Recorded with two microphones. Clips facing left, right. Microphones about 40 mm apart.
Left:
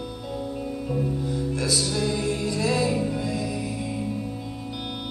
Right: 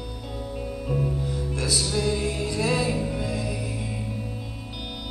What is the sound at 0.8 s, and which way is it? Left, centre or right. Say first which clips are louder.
Music: even; centre.